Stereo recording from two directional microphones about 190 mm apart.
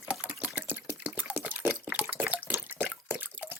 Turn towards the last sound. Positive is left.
turn(degrees=-10)  # may be behind; listen again after turning